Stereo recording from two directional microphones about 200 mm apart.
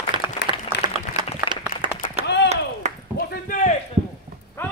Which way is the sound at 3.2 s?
45° left (ahead or behind).